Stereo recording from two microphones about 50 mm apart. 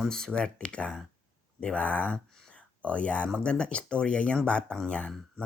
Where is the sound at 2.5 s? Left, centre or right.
Left.